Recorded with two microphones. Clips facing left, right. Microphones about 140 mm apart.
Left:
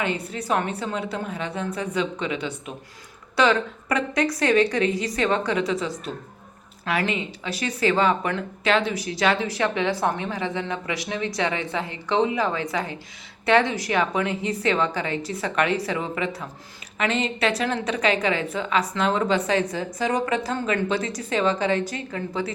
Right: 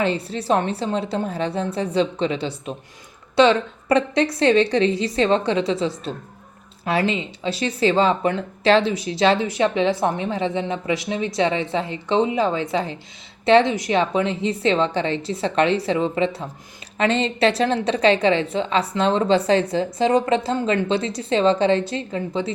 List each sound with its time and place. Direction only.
0.0 s a woman's voice: 30° right (ahead or behind)